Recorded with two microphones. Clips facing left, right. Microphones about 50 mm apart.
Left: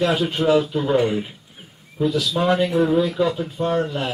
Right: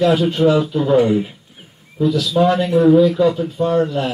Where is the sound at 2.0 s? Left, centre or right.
Centre.